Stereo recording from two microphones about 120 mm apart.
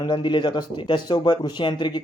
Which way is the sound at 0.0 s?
40° left (ahead or behind).